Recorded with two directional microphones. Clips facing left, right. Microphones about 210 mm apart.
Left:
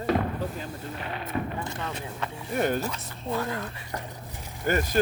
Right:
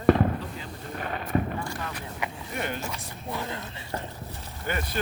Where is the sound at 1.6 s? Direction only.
20° left (ahead or behind).